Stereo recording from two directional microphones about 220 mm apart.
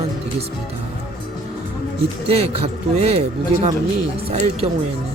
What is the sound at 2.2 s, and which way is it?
Speech, 25° right (ahead or behind).